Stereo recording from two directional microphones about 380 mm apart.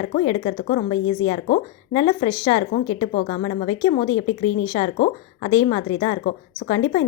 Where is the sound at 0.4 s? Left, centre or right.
Centre.